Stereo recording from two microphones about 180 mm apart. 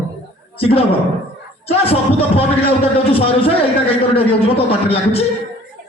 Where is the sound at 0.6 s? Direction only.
30° left (ahead or behind).